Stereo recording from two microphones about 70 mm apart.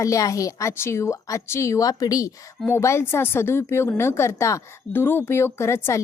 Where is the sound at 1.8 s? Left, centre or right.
Left.